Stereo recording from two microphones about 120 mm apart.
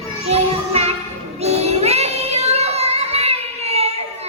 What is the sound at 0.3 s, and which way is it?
Child singing, 60° right (ahead or behind).